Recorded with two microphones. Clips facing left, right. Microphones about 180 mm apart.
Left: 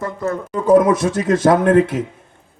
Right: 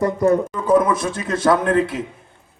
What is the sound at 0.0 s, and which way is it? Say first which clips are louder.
Speech: right 6 dB; 15° right (ahead or behind).